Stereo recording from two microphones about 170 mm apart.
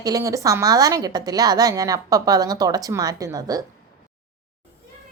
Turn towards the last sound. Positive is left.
turn(degrees=-20)  # may be behind; listen again after turning